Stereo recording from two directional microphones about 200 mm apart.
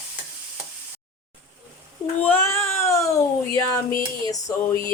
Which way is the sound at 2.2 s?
10° left (ahead or behind).